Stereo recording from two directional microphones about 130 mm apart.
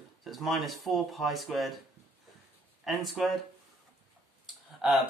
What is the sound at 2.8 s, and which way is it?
Speech, centre (ahead or behind).